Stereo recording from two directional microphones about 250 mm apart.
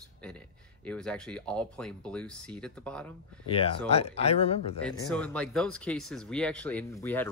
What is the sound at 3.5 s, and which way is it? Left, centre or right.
Speech, left.